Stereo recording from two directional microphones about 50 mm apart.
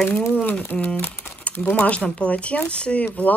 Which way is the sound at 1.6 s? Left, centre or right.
Left.